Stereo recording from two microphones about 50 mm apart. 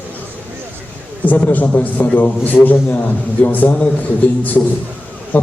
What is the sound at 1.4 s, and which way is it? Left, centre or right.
A man's voice, left.